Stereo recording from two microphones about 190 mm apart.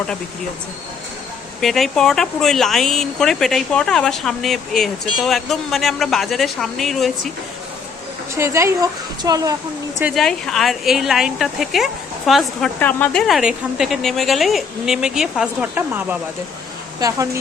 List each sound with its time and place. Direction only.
1.6 s speech: centre (ahead or behind)
8.4 s a woman's voice: 15° right (ahead or behind)
10.0 s speech: 5° right (ahead or behind)